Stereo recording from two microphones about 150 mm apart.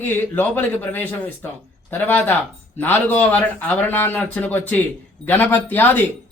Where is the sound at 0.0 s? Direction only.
15° left (ahead or behind).